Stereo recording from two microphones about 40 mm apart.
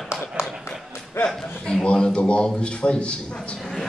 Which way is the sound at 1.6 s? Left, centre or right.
Left.